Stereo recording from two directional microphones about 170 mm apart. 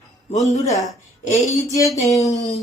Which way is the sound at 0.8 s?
45° left (ahead or behind).